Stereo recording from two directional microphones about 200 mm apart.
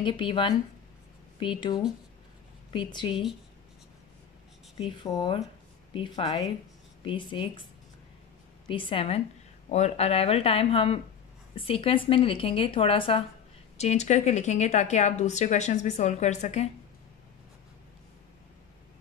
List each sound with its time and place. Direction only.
0.0 s speech: 25° left (ahead or behind)
4.7 s speech: 25° left (ahead or behind)
8.6 s speech: 25° left (ahead or behind)